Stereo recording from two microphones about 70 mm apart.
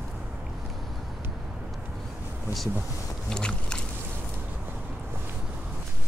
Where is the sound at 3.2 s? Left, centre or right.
Centre.